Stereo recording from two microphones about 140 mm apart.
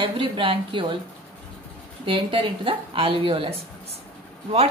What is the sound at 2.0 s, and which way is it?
A woman's voice, 40° right (ahead or behind).